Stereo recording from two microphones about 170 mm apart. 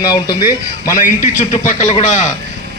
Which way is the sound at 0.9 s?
50° left (ahead or behind).